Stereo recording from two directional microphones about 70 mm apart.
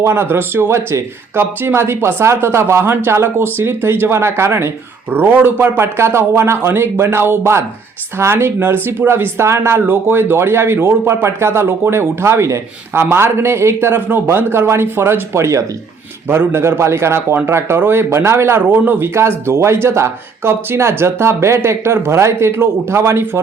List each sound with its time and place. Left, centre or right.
0.0 s speech: right
16.3 s speech: right